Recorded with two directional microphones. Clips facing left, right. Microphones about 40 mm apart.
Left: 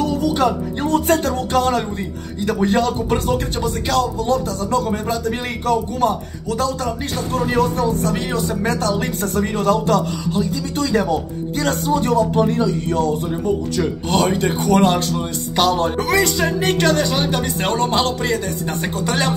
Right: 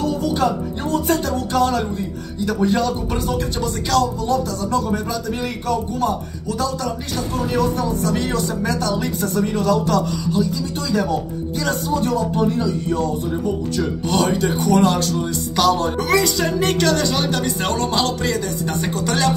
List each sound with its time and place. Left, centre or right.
0.4 s speech: left
3.6 s speech: left
4.2 s speech: left
7.5 s speech: left
14.0 s speech: left